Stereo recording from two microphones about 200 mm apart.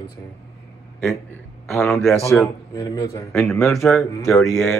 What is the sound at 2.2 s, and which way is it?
Speech, 15° left (ahead or behind).